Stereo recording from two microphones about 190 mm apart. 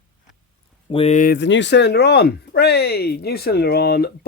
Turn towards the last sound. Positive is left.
turn(degrees=55)  # may be behind; listen again after turning